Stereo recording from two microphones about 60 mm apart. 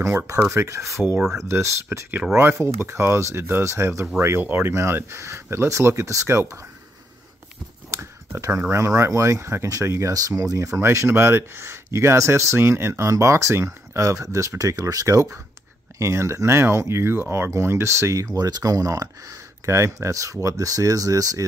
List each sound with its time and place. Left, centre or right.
0.5 s speech: right
4.4 s speech: right
7.9 s speech: right
10.1 s speech: right
10.8 s speech: right
13.1 s speech: right
14.6 s speech: right
18.2 s speech: right